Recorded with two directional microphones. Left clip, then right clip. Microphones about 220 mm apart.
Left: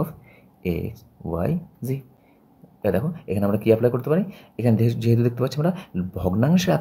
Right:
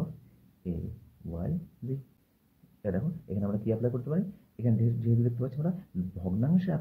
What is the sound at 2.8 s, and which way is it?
Speech, 30° left (ahead or behind).